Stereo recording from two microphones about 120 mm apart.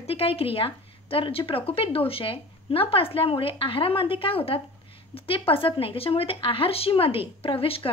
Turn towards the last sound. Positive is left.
turn(degrees=50)  # may be behind; listen again after turning